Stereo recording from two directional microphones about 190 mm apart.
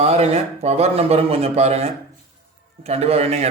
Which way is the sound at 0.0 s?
35° right (ahead or behind).